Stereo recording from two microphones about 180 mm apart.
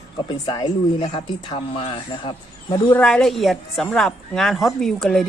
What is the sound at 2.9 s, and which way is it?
Speech, 5° left (ahead or behind).